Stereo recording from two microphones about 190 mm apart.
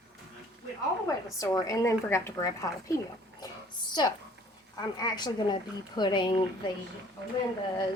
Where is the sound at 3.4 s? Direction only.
20° left (ahead or behind).